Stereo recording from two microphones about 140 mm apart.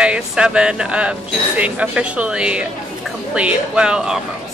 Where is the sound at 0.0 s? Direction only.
5° right (ahead or behind).